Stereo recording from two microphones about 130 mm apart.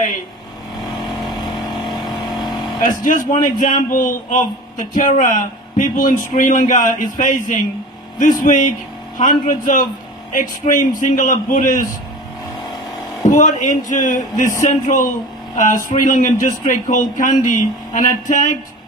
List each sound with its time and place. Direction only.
0.8 s vehicle: centre (ahead or behind)
2.8 s a man's voice: 90° left
13.3 s a man's voice: 70° left (ahead or behind)